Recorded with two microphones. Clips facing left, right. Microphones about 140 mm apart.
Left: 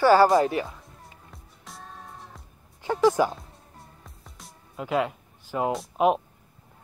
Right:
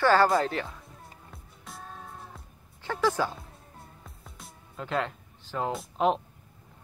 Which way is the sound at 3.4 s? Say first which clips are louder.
Even; centre (ahead or behind).